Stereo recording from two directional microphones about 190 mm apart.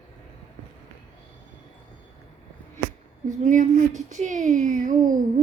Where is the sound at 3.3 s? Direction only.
40° right (ahead or behind).